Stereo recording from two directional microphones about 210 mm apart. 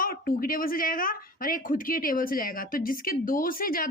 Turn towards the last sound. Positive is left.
turn(degrees=45)  # may be behind; listen again after turning